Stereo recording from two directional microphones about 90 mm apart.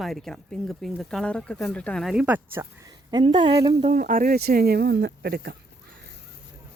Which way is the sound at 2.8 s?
50° right (ahead or behind).